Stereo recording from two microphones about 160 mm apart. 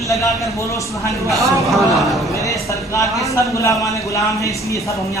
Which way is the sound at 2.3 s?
20° left (ahead or behind).